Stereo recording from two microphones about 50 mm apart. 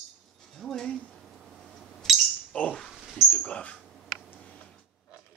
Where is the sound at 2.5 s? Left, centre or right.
Left.